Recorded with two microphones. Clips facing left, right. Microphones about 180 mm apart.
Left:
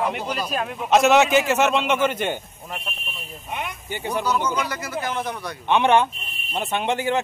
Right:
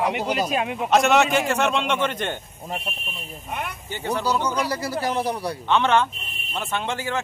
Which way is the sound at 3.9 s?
15° left (ahead or behind).